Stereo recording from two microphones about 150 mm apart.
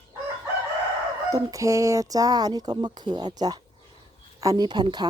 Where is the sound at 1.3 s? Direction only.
20° right (ahead or behind).